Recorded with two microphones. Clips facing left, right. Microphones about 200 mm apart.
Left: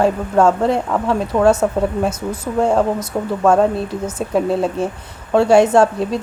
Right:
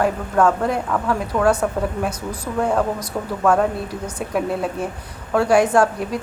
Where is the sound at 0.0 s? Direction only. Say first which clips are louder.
Left 4 dB; 25° left (ahead or behind).